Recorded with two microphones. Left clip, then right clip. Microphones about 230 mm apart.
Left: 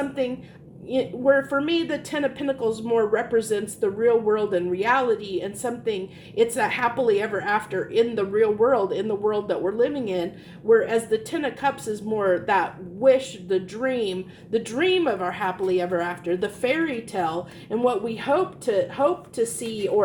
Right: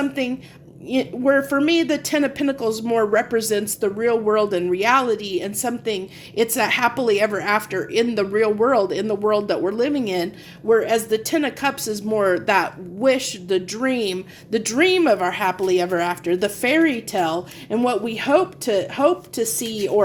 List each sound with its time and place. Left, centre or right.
0.9 s a woman's voice: right